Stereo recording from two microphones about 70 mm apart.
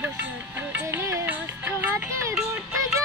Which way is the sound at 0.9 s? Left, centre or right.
Right.